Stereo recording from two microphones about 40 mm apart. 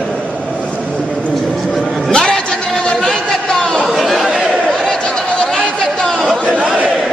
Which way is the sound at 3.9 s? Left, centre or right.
Centre.